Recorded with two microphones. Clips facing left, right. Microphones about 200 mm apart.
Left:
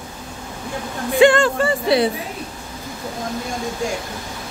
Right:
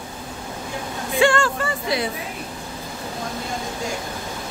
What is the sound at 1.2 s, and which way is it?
Speech, 20° left (ahead or behind).